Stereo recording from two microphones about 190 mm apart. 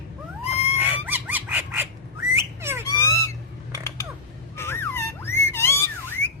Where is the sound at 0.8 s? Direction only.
10° right (ahead or behind).